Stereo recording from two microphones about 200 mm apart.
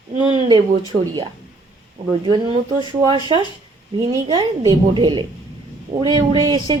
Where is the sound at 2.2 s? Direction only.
25° right (ahead or behind).